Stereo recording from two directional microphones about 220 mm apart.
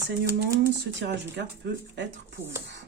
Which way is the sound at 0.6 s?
50° right (ahead or behind).